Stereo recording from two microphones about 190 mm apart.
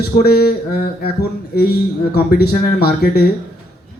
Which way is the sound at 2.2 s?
55° left (ahead or behind).